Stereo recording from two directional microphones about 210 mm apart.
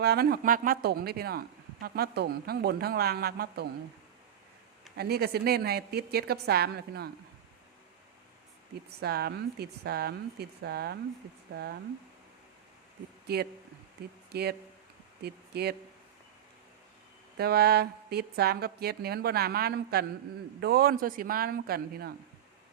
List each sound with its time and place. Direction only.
0.0 s speech: 50° right (ahead or behind)
4.9 s speech: 50° right (ahead or behind)
9.0 s speech: 50° right (ahead or behind)
13.2 s speech: 50° right (ahead or behind)
17.3 s speech: 50° right (ahead or behind)